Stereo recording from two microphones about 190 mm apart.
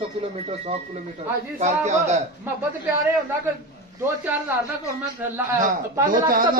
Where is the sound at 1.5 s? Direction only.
35° right (ahead or behind).